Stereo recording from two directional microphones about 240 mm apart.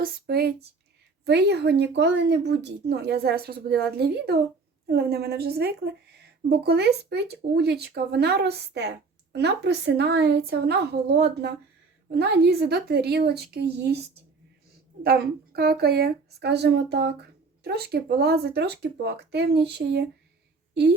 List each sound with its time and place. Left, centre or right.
0.0 s a woman's voice: right
15.0 s speech: right